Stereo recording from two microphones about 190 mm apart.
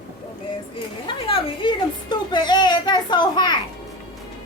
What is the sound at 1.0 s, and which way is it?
Music, 25° left (ahead or behind).